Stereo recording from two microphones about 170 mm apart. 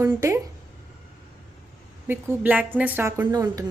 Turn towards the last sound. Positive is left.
turn(degrees=-20)  # may be behind; listen again after turning